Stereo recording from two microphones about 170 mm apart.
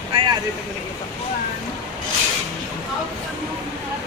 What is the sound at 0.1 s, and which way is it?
Vehicle, 30° right (ahead or behind).